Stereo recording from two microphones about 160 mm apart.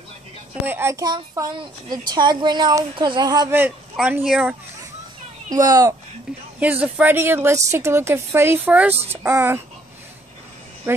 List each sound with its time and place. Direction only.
0.7 s a woman's voice: 15° right (ahead or behind)
3.5 s speech: 10° right (ahead or behind)
5.5 s a woman's voice: 20° right (ahead or behind)
6.6 s speech: 10° right (ahead or behind)
10.9 s speech: 15° right (ahead or behind)